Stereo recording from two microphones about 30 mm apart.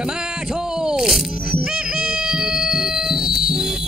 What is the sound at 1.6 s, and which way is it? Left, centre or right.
Music, right.